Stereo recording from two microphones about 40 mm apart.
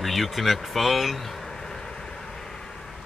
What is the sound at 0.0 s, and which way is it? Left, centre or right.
Speech, centre.